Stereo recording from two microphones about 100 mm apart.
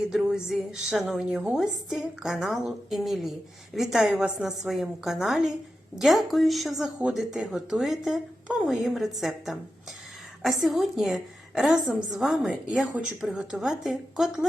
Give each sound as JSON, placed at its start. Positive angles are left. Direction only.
{"t": 0.1, "sound": "speech", "side_deg": -5}